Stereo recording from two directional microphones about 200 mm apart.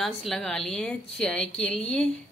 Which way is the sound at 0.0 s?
Centre (ahead or behind).